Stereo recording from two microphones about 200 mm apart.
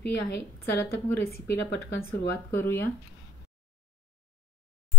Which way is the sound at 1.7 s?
60° left (ahead or behind).